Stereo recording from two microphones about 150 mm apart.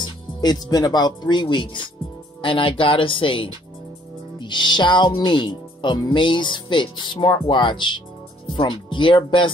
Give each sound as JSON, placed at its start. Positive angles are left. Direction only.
{"t": 0.0, "sound": "speech", "side_deg": 25}